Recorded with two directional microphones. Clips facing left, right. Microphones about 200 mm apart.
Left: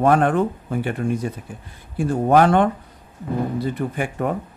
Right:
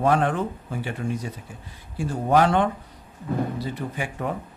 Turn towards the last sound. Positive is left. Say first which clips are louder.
# left 6 dB
turn(degrees=50)  # may be behind; listen again after turning